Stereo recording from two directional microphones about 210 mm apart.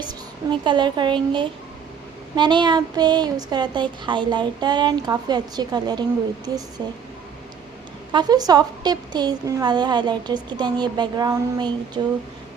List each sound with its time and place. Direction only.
0.6 s speech: 20° right (ahead or behind)
8.1 s speech: 20° right (ahead or behind)